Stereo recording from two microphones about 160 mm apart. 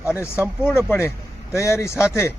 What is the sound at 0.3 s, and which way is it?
Speech, 10° right (ahead or behind).